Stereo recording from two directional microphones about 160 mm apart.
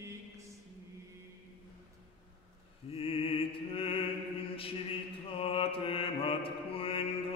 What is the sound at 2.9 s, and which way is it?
Music, 35° left (ahead or behind).